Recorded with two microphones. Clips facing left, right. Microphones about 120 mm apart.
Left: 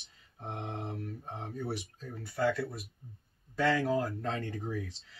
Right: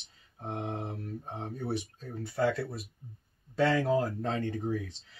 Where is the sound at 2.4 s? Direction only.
30° right (ahead or behind).